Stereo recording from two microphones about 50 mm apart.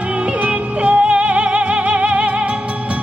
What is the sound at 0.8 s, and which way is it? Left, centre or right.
Music, right.